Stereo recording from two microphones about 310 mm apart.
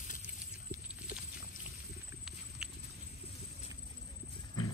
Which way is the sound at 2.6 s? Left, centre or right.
Centre.